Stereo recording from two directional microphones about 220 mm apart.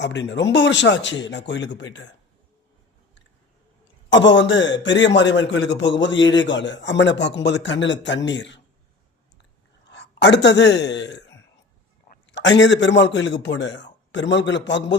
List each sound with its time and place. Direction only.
0.0 s a man's voice: 55° left (ahead or behind)
4.1 s a man's voice: 55° left (ahead or behind)
9.9 s a man's voice: 50° left (ahead or behind)